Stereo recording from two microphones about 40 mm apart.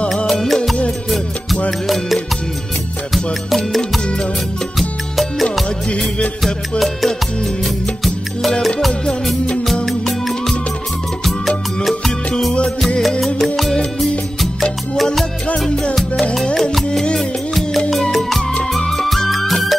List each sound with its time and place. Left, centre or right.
0.3 s music: centre
5.2 s music: centre
5.9 s music of bollywood: left
7.6 s music: centre
9.8 s music: centre
13.4 s music: centre
17.6 s music: centre